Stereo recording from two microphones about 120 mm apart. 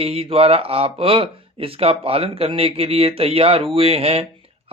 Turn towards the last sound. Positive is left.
turn(degrees=-55)  # may be behind; listen again after turning